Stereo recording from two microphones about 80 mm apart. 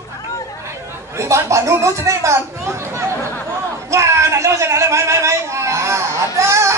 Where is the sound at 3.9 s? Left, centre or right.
Right.